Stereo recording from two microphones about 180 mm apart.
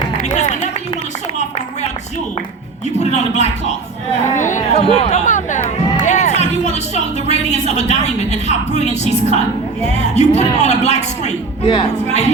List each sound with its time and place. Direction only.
0.3 s music: 40° left (ahead or behind)
3.0 s speech: 40° left (ahead or behind)
4.3 s a sound: 45° left (ahead or behind)
9.9 s a man's voice: 40° left (ahead or behind)